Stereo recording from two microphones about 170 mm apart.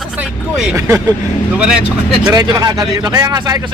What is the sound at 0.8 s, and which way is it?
Speech, 20° right (ahead or behind).